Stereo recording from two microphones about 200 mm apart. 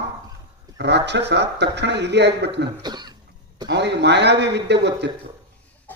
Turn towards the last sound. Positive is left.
turn(degrees=-60)  # may be behind; listen again after turning